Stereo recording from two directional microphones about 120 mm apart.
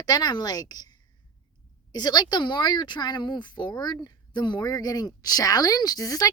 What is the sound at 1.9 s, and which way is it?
A woman's voice, 35° left (ahead or behind).